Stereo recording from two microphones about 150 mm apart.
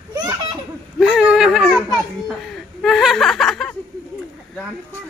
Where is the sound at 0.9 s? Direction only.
Centre (ahead or behind).